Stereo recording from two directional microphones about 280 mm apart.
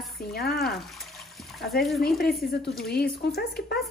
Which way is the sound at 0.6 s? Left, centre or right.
Centre.